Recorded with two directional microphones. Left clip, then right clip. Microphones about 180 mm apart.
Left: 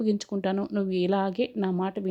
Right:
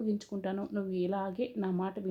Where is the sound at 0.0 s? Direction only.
45° left (ahead or behind).